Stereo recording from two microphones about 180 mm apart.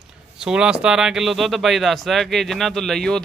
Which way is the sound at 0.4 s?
5° right (ahead or behind).